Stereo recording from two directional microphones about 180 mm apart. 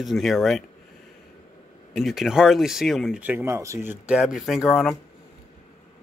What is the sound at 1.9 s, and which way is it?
Speech, centre (ahead or behind).